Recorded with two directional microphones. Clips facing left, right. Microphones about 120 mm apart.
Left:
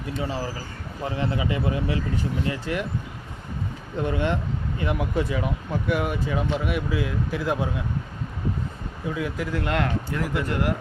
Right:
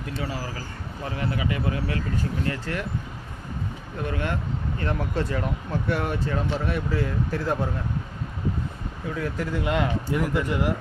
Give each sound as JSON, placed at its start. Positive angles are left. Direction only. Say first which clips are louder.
{"t": 0.2, "sound": "speech", "louder": "left 3 dB", "side_deg": 25}
{"t": 4.0, "sound": "speech", "louder": "left 4 dB", "side_deg": 20}
{"t": 9.1, "sound": "speech", "louder": "even", "side_deg": 5}
{"t": 10.1, "sound": "a man's voice", "louder": "right 6 dB", "side_deg": -20}